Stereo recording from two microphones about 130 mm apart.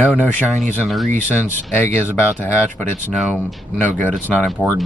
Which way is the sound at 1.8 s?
15° left (ahead or behind).